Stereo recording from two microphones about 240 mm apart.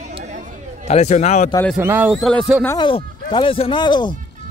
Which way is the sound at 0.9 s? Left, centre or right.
Left.